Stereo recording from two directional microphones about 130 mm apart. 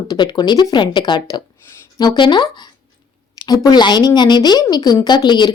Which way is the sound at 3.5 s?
30° left (ahead or behind).